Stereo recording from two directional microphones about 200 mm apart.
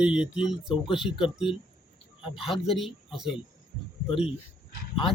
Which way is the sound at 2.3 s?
Centre (ahead or behind).